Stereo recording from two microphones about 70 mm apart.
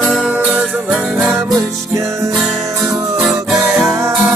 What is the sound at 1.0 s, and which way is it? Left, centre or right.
Music, centre.